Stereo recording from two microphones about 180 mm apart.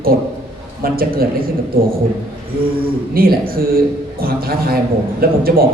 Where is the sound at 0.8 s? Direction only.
55° right (ahead or behind).